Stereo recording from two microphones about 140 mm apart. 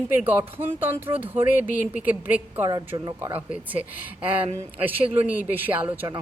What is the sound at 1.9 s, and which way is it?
A woman's voice, 10° right (ahead or behind).